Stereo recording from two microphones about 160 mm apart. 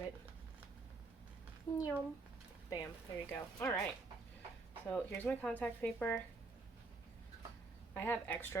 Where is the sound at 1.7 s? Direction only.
25° left (ahead or behind).